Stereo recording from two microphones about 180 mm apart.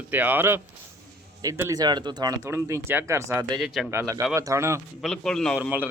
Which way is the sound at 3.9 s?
15° right (ahead or behind).